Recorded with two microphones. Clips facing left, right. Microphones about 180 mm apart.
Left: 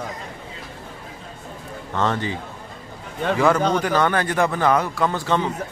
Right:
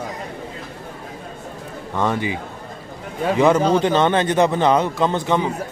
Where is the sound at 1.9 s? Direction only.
10° right (ahead or behind).